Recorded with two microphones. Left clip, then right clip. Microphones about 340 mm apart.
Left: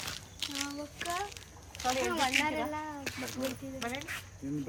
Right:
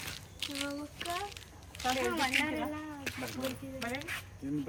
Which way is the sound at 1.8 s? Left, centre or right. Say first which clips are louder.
Left 1 dB; centre.